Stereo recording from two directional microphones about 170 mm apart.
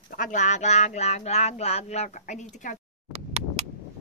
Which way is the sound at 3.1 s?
40° right (ahead or behind).